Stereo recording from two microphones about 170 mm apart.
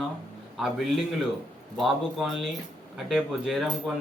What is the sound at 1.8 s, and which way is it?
Speech, centre (ahead or behind).